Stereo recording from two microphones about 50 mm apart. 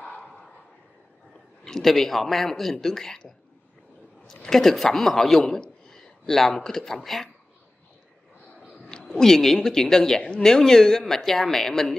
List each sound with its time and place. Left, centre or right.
1.6 s a man's voice: centre
4.5 s speech: centre
8.7 s a sound: centre
9.0 s speech: centre